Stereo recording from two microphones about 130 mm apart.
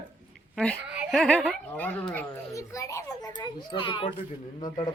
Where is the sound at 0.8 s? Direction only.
10° right (ahead or behind).